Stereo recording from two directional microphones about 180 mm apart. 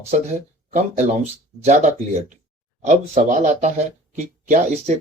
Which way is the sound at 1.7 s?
40° right (ahead or behind).